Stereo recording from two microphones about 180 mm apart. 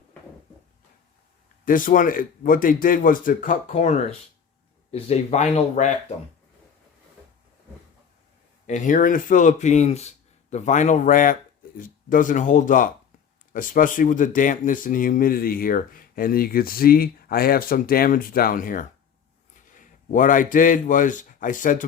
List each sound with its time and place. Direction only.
1.6 s speech: 50° left (ahead or behind)
8.6 s a man's voice: 45° left (ahead or behind)